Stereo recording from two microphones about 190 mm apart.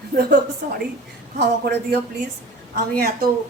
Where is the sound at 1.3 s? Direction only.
55° right (ahead or behind).